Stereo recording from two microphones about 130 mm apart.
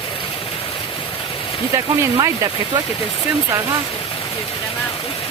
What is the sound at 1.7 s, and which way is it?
Speech, 25° right (ahead or behind).